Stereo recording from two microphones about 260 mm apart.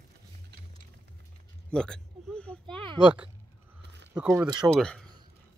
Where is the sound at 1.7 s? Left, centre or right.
Centre.